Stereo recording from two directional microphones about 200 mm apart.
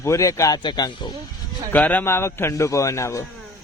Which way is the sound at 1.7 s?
10° left (ahead or behind).